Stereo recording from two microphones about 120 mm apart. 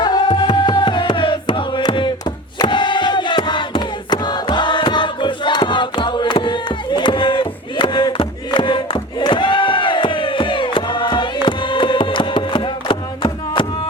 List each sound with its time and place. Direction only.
0.0 s music: 35° left (ahead or behind)
2.6 s crowd: 40° left (ahead or behind)